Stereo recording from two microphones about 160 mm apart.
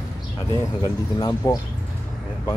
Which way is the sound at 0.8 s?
25° left (ahead or behind).